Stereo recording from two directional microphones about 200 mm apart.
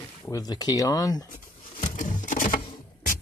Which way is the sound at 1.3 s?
40° left (ahead or behind).